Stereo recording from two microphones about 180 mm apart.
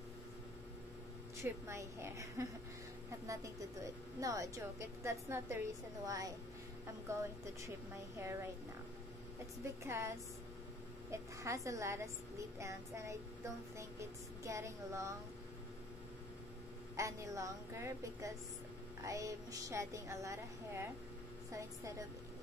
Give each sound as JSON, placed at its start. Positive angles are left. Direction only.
{"t": 1.4, "sound": "a woman's voice", "side_deg": -15}
{"t": 9.8, "sound": "a woman's voice", "side_deg": -15}
{"t": 16.9, "sound": "a woman's voice", "side_deg": -15}